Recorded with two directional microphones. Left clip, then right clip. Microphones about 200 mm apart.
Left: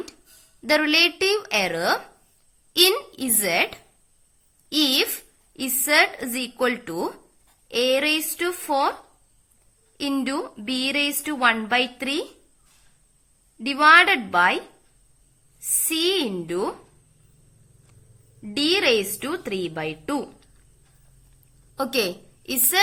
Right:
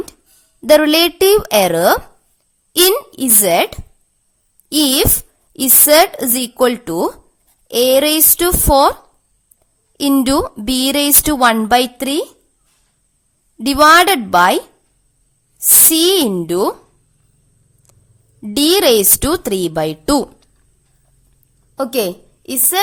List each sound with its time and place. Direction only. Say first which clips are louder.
0.6 s a woman's voice: right 9 dB; 55° right (ahead or behind)
7.7 s speech: right 9 dB; 70° right (ahead or behind)
10.0 s speech: right 12 dB; 65° right (ahead or behind)
13.8 s a woman's voice: right 6 dB; 65° right (ahead or behind)
15.9 s speech: right 8 dB; 70° right (ahead or behind)
18.4 s speech: right 9 dB; 70° right (ahead or behind)
21.8 s a woman's voice: right 6 dB; 50° right (ahead or behind)